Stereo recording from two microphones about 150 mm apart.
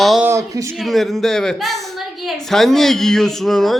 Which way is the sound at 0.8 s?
Centre (ahead or behind).